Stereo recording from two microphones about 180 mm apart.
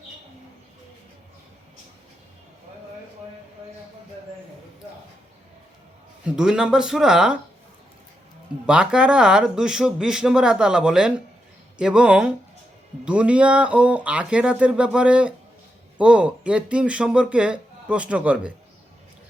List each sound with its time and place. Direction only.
6.2 s speech: 5° right (ahead or behind)
8.6 s speech: 5° right (ahead or behind)